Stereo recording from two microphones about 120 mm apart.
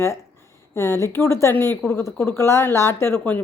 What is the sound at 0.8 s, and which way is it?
A woman's voice, 20° left (ahead or behind).